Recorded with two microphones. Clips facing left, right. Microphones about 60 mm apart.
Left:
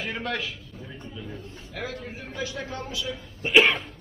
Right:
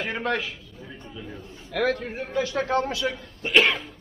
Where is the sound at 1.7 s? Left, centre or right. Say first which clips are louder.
Right 10 dB; right.